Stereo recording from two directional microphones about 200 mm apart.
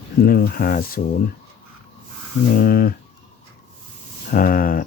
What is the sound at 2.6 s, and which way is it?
Speech, 50° left (ahead or behind).